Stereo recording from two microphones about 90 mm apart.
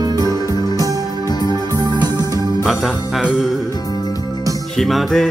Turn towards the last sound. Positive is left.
turn(degrees=0)  # may be behind; listen again after turning